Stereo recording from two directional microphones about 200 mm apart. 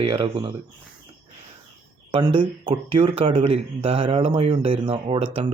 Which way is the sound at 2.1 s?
25° right (ahead or behind).